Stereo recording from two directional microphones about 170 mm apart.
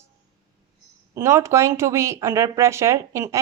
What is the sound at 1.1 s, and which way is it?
Speech, 15° right (ahead or behind).